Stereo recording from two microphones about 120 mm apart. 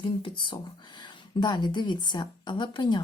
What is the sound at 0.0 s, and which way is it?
Speech, 45° left (ahead or behind).